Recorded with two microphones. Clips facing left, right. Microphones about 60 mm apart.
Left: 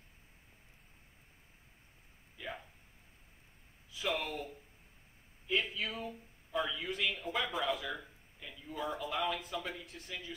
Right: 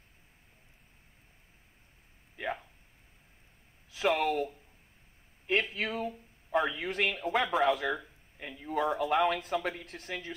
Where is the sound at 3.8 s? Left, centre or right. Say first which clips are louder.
Right 9 dB; right.